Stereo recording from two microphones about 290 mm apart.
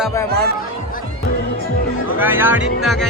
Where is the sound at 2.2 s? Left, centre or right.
Centre.